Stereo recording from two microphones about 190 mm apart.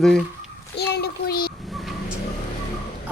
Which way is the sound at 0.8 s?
55° left (ahead or behind).